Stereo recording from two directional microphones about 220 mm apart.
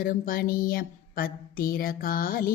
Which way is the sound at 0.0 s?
40° left (ahead or behind).